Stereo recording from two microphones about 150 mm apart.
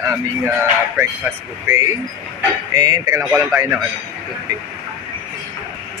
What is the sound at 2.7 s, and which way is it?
Speech, 25° right (ahead or behind).